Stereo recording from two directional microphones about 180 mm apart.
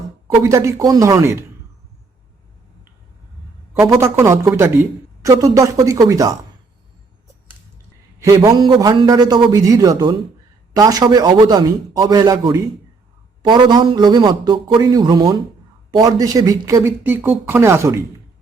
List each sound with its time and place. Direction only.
0.4 s speech: 15° right (ahead or behind)
3.8 s a man's voice: 15° right (ahead or behind)
8.2 s a man's voice: 20° right (ahead or behind)